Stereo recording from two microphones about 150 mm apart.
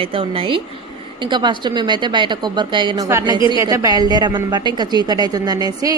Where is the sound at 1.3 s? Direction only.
30° right (ahead or behind).